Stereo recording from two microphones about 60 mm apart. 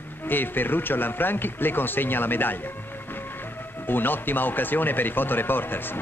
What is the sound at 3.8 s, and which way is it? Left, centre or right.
Speech, left.